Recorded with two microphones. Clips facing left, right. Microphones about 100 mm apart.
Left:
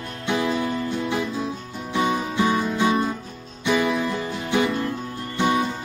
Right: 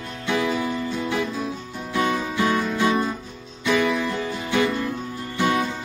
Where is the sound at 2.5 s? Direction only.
15° left (ahead or behind).